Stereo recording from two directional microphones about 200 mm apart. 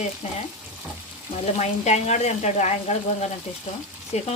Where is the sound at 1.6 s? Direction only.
35° left (ahead or behind).